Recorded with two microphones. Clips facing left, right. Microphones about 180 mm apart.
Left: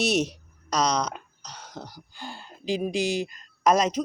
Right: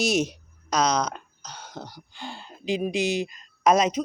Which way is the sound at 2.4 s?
35° left (ahead or behind).